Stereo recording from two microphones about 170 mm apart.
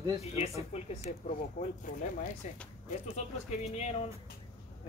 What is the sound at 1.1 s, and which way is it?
Speech, 50° left (ahead or behind).